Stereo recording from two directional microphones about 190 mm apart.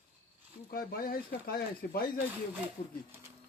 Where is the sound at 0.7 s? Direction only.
50° left (ahead or behind).